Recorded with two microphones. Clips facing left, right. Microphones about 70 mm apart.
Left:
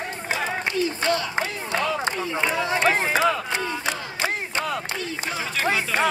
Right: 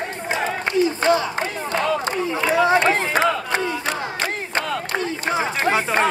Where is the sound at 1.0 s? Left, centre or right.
Right.